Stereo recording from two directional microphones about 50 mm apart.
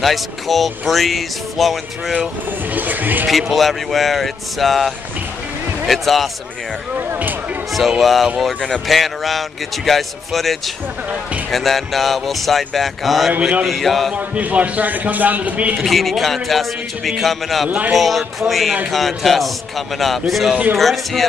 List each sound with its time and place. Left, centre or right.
0.0 s speech: centre
2.7 s a man's voice: right
3.3 s speech: centre
8.0 s speech: centre
13.4 s speech: right
13.7 s speech: centre
14.1 s a man's voice: right
15.8 s speech: centre
17.6 s a man's voice: right
17.9 s speech: centre